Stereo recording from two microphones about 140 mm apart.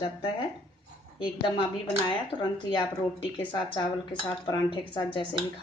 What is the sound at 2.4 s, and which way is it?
Speech, 35° left (ahead or behind).